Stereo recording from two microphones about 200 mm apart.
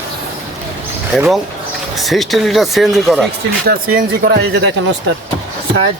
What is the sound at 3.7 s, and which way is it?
Speech, 45° right (ahead or behind).